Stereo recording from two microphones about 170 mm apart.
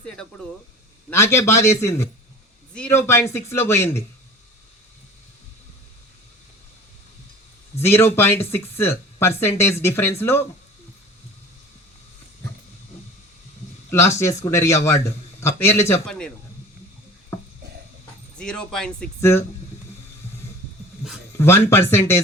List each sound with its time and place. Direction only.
0.0 s speech: 5° left (ahead or behind)
1.1 s speech: 15° left (ahead or behind)
7.8 s speech: 15° left (ahead or behind)
13.9 s speech: 15° left (ahead or behind)
18.3 s speech: 5° left (ahead or behind)
21.3 s speech: 15° left (ahead or behind)